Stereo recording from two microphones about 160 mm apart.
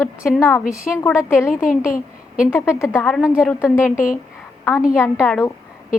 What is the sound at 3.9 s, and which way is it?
Speech, 55° left (ahead or behind).